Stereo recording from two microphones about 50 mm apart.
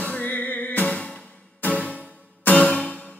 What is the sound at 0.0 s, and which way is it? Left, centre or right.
Music, left.